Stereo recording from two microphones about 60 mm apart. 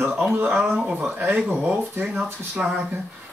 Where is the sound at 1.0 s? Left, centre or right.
Right.